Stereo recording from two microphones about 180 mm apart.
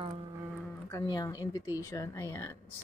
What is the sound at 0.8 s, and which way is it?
Speech, 20° left (ahead or behind).